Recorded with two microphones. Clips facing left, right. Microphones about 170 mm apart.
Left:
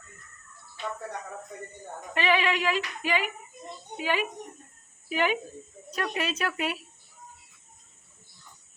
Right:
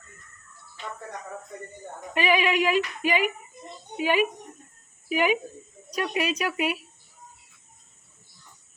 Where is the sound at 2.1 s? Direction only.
15° right (ahead or behind).